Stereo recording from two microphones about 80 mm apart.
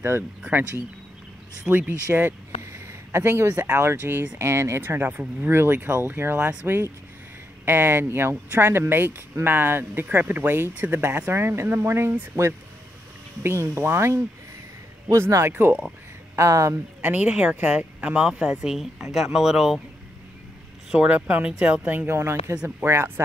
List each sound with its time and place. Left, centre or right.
0.4 s speech: right
16.3 s speech: right
17.0 s speech: centre
20.9 s speech: centre; by 23.2 s right